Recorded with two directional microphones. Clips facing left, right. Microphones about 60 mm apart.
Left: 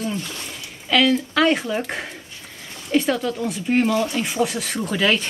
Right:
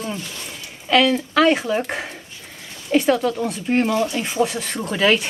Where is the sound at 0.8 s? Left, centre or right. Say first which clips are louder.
Right 1 dB; centre.